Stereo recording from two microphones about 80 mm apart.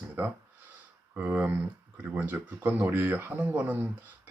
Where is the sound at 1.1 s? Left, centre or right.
Right.